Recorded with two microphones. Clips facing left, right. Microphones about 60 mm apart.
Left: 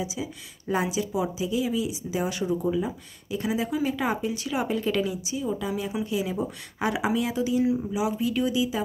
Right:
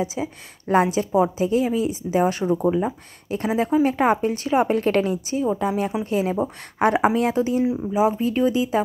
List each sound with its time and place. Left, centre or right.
0.0 s speech: right